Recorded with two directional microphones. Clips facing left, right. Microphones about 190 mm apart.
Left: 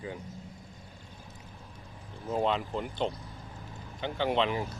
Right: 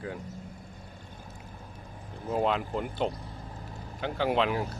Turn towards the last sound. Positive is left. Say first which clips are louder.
# right 2 dB
turn(degrees=-5)  # may be behind; listen again after turning